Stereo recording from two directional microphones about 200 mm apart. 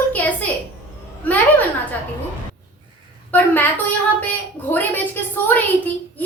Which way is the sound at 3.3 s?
10° left (ahead or behind).